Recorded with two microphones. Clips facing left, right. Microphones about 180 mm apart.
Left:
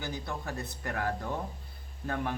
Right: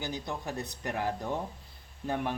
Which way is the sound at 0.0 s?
20° right (ahead or behind).